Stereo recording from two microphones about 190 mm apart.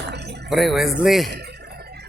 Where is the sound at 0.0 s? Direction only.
60° right (ahead or behind).